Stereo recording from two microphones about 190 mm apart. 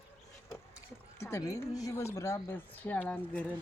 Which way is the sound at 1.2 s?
15° left (ahead or behind).